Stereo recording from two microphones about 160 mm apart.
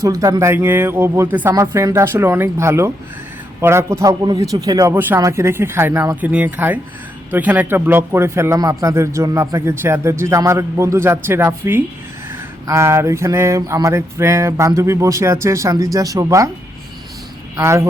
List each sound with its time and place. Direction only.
0.0 s a man's voice: 20° right (ahead or behind)
12.3 s a sound: 15° right (ahead or behind)
17.6 s a man's voice: 15° right (ahead or behind)